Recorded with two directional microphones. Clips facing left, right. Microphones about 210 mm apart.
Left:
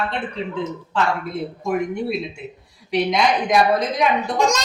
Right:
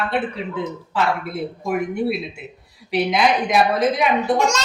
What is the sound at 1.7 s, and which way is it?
Speech, 5° right (ahead or behind).